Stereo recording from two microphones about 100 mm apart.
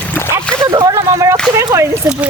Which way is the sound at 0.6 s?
40° right (ahead or behind).